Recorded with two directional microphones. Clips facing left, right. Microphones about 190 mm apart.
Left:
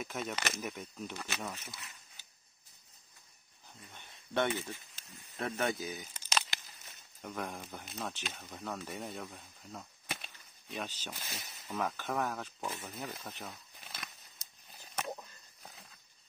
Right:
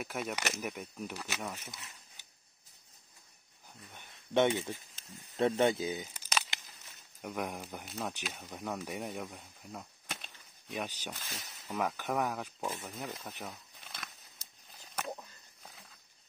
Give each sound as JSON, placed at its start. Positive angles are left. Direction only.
{"t": 0.0, "sound": "speech", "side_deg": -10}
{"t": 3.9, "sound": "a sound", "side_deg": -15}
{"t": 5.4, "sound": "speech", "side_deg": -25}
{"t": 7.2, "sound": "speech", "side_deg": -10}
{"t": 9.7, "sound": "cap gun", "side_deg": 0}
{"t": 10.7, "sound": "speech", "side_deg": -10}
{"t": 12.9, "sound": "speech", "side_deg": 0}
{"t": 13.3, "sound": "speech", "side_deg": -10}
{"t": 13.8, "sound": "a sound", "side_deg": 5}